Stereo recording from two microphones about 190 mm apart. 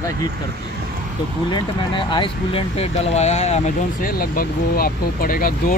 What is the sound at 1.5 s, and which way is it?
Speech, 25° left (ahead or behind).